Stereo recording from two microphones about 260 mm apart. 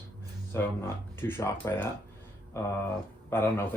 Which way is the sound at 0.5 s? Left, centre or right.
Centre.